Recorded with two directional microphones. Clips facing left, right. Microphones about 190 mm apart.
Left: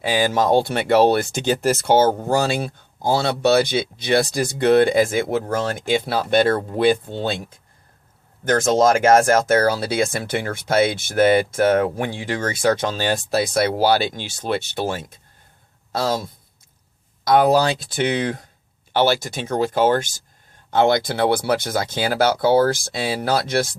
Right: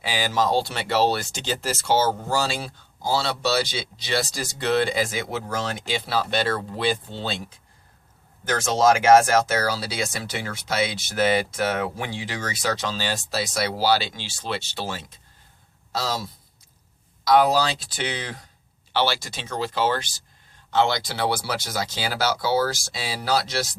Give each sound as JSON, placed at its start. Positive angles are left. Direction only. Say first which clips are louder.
{"t": 0.0, "sound": "speech", "louder": "left 5 dB", "side_deg": 50}
{"t": 8.4, "sound": "speech", "louder": "left 4 dB", "side_deg": 55}